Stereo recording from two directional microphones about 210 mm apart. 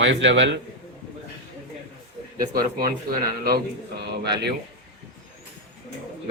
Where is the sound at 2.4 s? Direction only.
45° right (ahead or behind).